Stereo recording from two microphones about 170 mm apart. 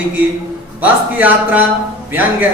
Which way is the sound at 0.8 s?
10° right (ahead or behind).